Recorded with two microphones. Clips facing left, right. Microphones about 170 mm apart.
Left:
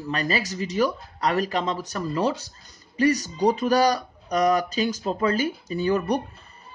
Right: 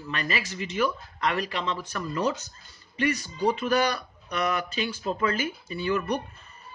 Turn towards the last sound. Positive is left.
turn(degrees=35)  # may be behind; listen again after turning